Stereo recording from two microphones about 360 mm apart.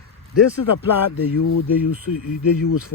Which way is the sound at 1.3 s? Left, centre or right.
Left.